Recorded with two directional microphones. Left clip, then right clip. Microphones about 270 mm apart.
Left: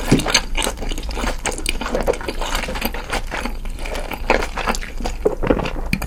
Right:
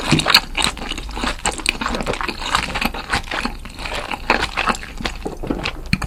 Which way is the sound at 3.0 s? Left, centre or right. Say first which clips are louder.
Right 3 dB; centre.